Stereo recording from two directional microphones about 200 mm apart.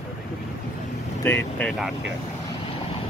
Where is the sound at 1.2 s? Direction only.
10° left (ahead or behind).